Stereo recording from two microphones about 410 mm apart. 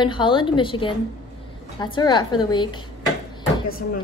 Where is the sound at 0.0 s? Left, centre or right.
Centre.